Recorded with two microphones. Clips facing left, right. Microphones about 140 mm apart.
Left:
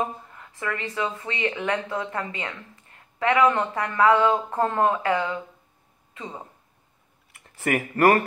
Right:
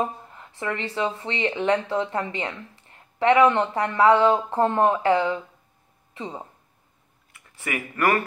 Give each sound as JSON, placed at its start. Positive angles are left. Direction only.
{"t": 0.3, "sound": "speech", "side_deg": -25}
{"t": 7.4, "sound": "speech", "side_deg": 40}